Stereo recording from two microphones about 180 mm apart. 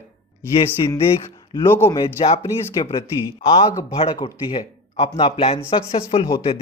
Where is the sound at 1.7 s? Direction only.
15° left (ahead or behind).